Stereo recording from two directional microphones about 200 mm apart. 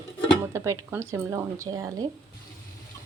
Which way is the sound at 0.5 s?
15° right (ahead or behind).